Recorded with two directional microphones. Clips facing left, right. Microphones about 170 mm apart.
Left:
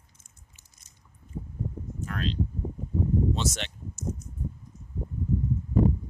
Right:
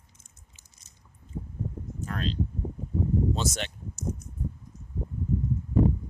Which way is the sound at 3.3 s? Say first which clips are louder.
Even; 45° right (ahead or behind).